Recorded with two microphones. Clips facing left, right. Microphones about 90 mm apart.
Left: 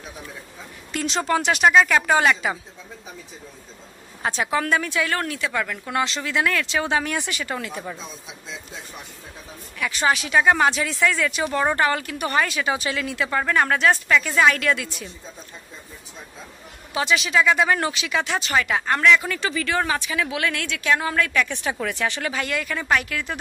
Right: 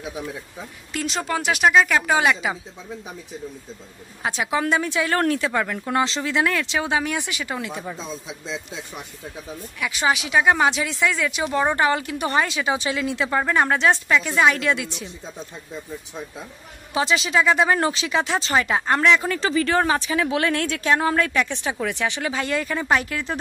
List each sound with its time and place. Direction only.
0.9 s speech: 5° right (ahead or behind)
4.2 s speech: 10° right (ahead or behind); by 5.2 s 25° right (ahead or behind)
5.2 s speech: 40° right (ahead or behind)
5.5 s speech: 25° right (ahead or behind)
9.8 s speech: 10° right (ahead or behind)
16.9 s speech: 25° right (ahead or behind)